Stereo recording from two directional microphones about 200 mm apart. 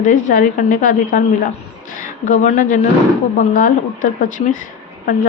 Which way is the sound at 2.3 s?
40° left (ahead or behind).